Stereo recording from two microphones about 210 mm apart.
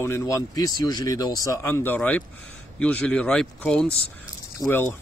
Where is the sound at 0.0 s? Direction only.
15° left (ahead or behind).